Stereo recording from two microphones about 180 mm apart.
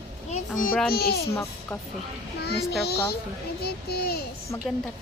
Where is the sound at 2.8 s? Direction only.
65° left (ahead or behind).